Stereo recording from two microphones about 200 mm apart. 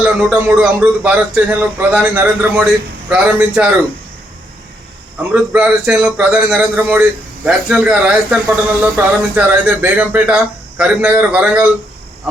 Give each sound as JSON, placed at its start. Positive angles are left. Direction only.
{"t": 0.0, "sound": "a man's voice", "side_deg": -5}
{"t": 5.3, "sound": "a man's voice", "side_deg": -5}